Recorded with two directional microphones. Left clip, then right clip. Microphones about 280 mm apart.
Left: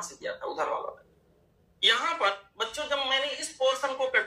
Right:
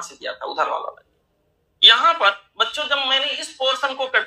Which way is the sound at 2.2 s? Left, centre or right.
Centre.